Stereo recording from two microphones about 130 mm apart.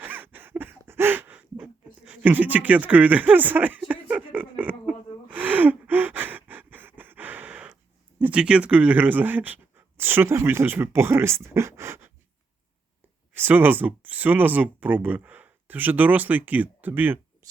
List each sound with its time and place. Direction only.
0.0 s a sound: 15° right (ahead or behind)
8.2 s speech: 10° right (ahead or behind)
13.3 s speech: 15° right (ahead or behind)
17.4 s shuffling cards: 25° right (ahead or behind)